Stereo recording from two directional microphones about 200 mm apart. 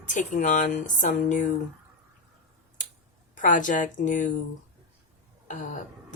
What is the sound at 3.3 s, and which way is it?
Speech, 40° left (ahead or behind).